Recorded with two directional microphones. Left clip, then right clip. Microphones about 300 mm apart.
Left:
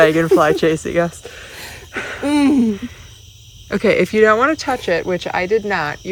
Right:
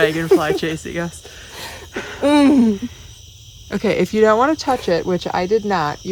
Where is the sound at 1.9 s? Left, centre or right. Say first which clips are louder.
Left 4 dB; centre.